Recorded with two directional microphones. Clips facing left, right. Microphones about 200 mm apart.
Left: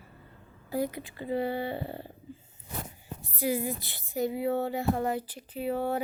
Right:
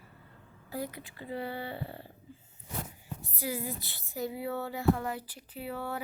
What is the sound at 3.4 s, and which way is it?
Speech, 15° left (ahead or behind).